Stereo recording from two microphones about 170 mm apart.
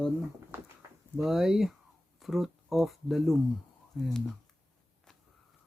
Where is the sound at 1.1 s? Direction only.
Centre (ahead or behind).